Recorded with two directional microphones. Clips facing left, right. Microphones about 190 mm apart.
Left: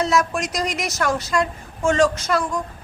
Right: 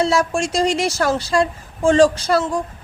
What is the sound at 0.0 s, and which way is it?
A woman's voice, 30° right (ahead or behind).